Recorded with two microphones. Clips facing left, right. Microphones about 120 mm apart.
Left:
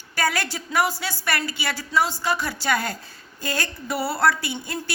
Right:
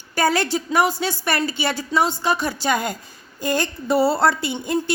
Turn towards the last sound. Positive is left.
turn(degrees=-20)  # may be behind; listen again after turning